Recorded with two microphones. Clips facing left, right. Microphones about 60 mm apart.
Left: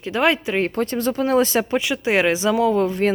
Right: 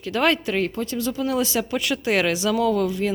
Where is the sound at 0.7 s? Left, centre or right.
Left.